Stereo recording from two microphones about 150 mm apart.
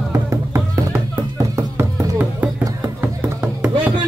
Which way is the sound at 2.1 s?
15° right (ahead or behind).